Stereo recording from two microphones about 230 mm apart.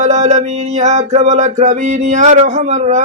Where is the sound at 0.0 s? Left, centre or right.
Right.